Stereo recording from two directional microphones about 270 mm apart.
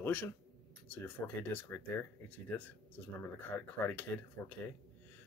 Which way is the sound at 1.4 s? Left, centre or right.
Centre.